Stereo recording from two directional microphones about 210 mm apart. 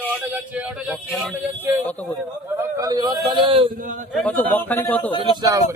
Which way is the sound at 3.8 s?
40° right (ahead or behind).